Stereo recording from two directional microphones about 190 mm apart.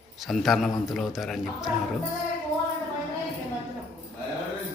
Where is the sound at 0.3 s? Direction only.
Centre (ahead or behind).